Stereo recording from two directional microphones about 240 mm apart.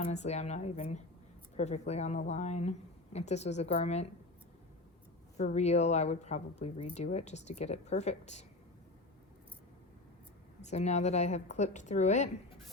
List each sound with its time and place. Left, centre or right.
0.0 s speech: left
5.4 s speech: left
10.6 s speech: left